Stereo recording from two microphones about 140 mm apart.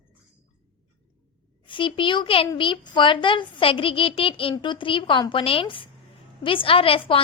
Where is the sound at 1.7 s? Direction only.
35° left (ahead or behind).